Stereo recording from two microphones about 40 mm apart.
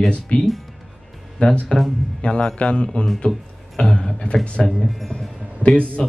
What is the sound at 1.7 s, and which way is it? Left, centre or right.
Speech, centre.